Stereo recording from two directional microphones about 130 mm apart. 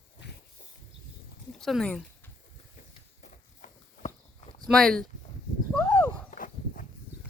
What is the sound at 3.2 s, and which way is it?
Walk, 75° left (ahead or behind).